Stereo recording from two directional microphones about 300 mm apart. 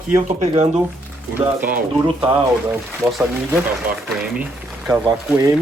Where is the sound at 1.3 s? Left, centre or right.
Centre.